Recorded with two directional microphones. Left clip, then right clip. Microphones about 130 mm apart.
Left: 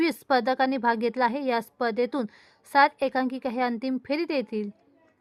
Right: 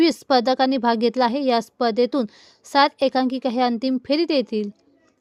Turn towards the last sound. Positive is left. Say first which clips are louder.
# right 7 dB
turn(degrees=-25)  # may be behind; listen again after turning